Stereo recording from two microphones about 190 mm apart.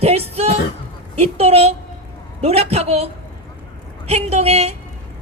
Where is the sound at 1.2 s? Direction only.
35° right (ahead or behind).